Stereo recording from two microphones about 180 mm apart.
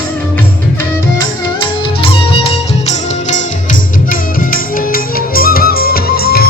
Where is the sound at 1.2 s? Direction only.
25° left (ahead or behind).